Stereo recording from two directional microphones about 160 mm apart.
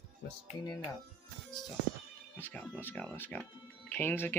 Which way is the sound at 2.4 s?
10° left (ahead or behind).